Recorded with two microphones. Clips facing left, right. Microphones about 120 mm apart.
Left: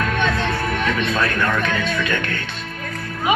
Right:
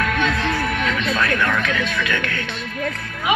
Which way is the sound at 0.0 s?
25° left (ahead or behind).